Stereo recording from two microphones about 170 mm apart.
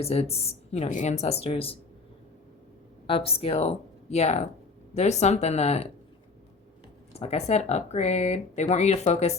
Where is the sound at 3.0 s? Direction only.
35° left (ahead or behind).